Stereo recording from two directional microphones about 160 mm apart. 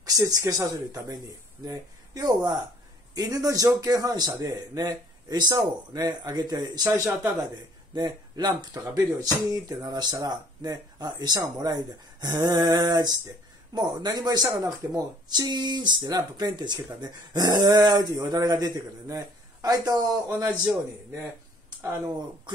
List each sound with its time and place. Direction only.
0.0 s speech: 25° right (ahead or behind)
7.9 s speech: 25° right (ahead or behind)
21.8 s speech: 15° right (ahead or behind)